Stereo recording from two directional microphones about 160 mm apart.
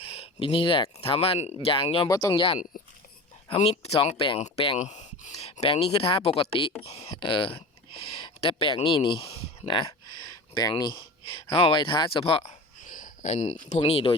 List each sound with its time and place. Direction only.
0.0 s speech: 35° left (ahead or behind)
2.0 s speech: 20° left (ahead or behind); by 12.5 s 40° left (ahead or behind)
12.8 s speech: 55° left (ahead or behind); by 14.1 s 40° left (ahead or behind)